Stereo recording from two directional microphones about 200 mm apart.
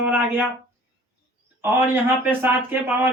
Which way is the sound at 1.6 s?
10° right (ahead or behind).